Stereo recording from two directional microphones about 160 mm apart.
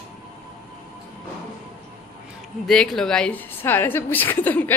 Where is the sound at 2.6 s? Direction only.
5° left (ahead or behind).